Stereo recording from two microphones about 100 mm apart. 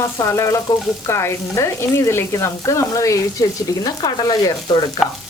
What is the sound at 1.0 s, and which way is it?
Sizzle, 30° left (ahead or behind).